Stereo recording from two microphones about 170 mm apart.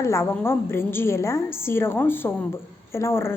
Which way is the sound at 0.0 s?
15° left (ahead or behind).